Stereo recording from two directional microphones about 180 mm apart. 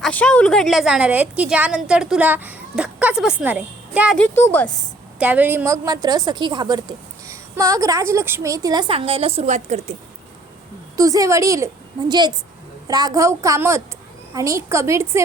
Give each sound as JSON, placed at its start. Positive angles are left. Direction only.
{"t": 0.0, "sound": "a woman's voice", "side_deg": 5}
{"t": 4.2, "sound": "speech", "side_deg": 5}
{"t": 5.2, "sound": "a woman's voice", "side_deg": -10}
{"t": 10.9, "sound": "a woman's voice", "side_deg": -20}